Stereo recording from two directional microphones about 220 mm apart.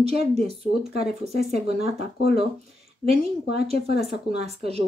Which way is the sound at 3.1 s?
30° right (ahead or behind).